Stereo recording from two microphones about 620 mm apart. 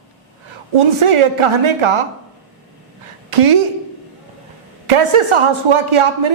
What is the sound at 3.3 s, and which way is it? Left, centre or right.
Speech, right.